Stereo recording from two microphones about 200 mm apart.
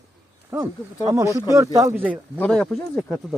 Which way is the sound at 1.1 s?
15° right (ahead or behind).